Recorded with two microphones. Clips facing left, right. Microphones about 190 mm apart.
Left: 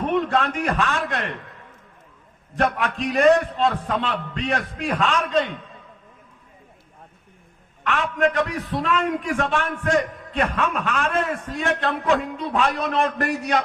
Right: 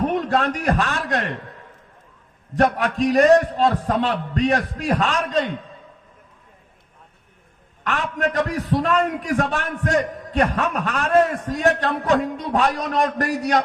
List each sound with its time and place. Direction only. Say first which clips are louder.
0.0 s a man's voice: right 1 dB; 40° right (ahead or behind)
2.6 s a man's voice: right 4 dB; 35° right (ahead or behind)
7.9 s a man's voice: left 2 dB; 40° right (ahead or behind)